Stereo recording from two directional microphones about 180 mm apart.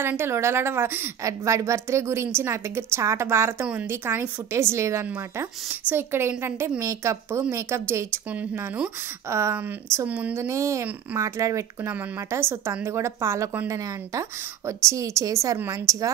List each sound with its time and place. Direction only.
0.0 s a woman's voice: 10° right (ahead or behind)